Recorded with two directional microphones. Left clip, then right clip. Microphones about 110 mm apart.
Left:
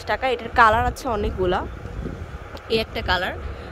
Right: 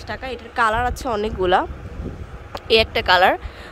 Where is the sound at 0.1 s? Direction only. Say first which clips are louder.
Left 7 dB; 20° left (ahead or behind).